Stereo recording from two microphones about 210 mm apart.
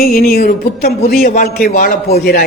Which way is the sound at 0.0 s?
45° left (ahead or behind).